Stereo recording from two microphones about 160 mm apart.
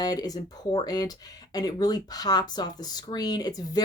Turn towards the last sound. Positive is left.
turn(degrees=25)  # may be behind; listen again after turning